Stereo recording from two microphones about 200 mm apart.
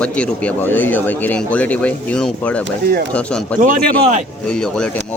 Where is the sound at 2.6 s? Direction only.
60° right (ahead or behind).